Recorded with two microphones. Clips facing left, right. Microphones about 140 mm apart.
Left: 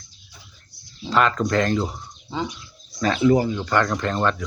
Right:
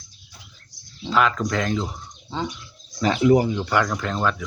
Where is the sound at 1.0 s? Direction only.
Centre (ahead or behind).